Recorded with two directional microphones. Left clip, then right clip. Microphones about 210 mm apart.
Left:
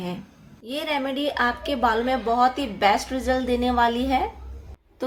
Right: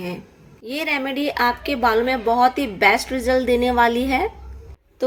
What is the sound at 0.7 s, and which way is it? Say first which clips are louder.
A woman's voice: right 3 dB; 10° right (ahead or behind).